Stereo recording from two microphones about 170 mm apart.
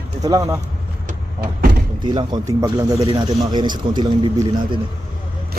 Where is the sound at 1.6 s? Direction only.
65° right (ahead or behind).